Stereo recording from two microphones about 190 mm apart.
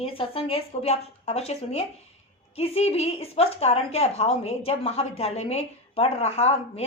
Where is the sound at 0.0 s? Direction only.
30° left (ahead or behind).